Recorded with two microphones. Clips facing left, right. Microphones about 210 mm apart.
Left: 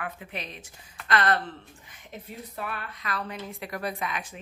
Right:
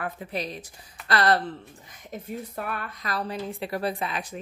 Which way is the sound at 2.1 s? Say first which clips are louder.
Right 6 dB; 45° right (ahead or behind).